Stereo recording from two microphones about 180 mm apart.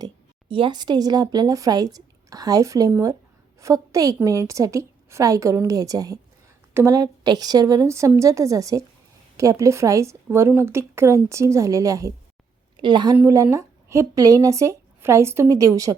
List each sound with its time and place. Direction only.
0.0 s a woman's voice: 30° right (ahead or behind)